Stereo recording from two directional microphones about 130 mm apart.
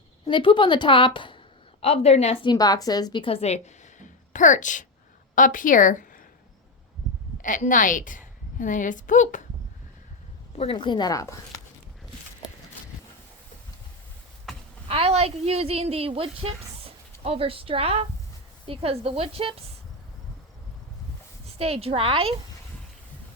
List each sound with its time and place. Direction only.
0.3 s a woman's voice: 40° left (ahead or behind)
1.8 s a woman's voice: 55° left (ahead or behind)
2.5 s a woman's voice: 30° left (ahead or behind); by 3.6 s 50° left (ahead or behind)
4.3 s a woman's voice: 75° left (ahead or behind)
5.3 s speech: 90° left
7.4 s a woman's voice: 90° left
10.6 s a woman's voice: 40° left (ahead or behind); by 11.3 s 25° left (ahead or behind)
14.5 s a sound: centre (ahead or behind)
14.8 s speech: 50° right (ahead or behind)
21.6 s speech: 50° right (ahead or behind)